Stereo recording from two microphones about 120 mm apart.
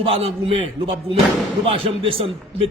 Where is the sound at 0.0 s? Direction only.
55° right (ahead or behind).